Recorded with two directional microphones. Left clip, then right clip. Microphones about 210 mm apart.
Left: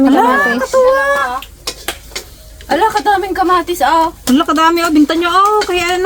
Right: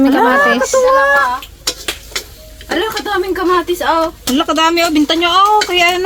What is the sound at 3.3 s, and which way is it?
Speech, 50° left (ahead or behind).